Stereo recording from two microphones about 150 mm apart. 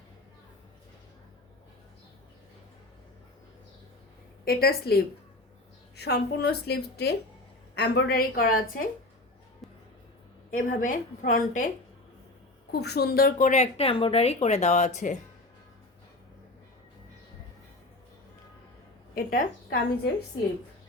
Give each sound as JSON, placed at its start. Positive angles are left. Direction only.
{"t": 4.4, "sound": "a woman's voice", "side_deg": 90}
{"t": 10.5, "sound": "a woman's voice", "side_deg": 65}
{"t": 12.7, "sound": "speech", "side_deg": 90}
{"t": 13.5, "sound": "speech", "side_deg": 45}
{"t": 19.1, "sound": "a woman's voice", "side_deg": 70}